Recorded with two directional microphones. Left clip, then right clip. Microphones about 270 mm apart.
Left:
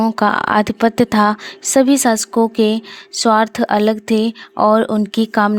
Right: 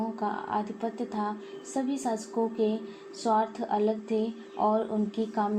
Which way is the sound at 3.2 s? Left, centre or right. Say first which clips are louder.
Left 13 dB; left.